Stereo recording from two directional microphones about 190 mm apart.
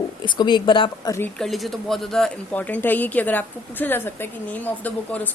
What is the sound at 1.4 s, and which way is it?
Speech, centre (ahead or behind).